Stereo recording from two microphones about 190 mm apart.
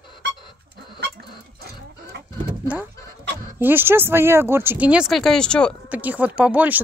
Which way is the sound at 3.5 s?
10° right (ahead or behind).